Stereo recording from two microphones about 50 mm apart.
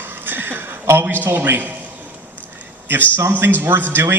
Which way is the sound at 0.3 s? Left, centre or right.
Right.